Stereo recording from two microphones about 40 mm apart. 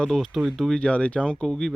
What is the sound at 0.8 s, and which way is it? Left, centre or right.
Speech, left.